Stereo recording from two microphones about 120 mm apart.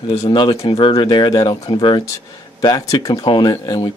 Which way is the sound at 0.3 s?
40° left (ahead or behind).